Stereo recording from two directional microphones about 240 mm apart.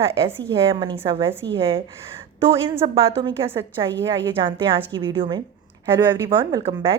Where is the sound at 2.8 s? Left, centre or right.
Right.